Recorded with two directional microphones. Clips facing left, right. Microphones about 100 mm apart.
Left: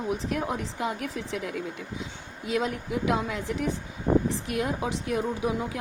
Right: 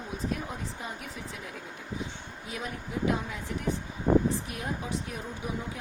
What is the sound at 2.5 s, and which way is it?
Speech, 90° left.